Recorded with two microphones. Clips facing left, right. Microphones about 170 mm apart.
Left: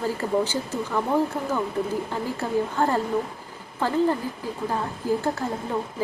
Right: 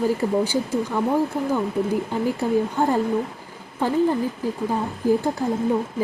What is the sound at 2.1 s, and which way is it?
Speech, 15° right (ahead or behind).